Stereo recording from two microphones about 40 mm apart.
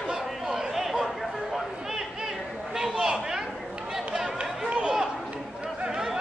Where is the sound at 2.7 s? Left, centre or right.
Centre.